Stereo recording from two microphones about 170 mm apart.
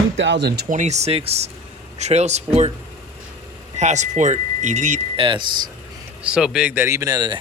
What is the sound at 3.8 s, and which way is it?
Speech, 45° right (ahead or behind).